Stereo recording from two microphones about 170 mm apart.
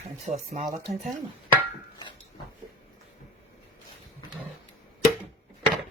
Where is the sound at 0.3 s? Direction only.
45° right (ahead or behind).